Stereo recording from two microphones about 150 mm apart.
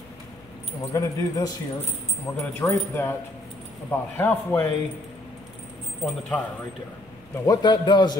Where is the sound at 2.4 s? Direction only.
15° left (ahead or behind).